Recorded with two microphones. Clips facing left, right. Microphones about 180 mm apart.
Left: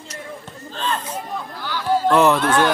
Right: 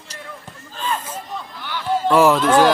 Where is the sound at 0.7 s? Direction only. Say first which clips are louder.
Even; 5° right (ahead or behind).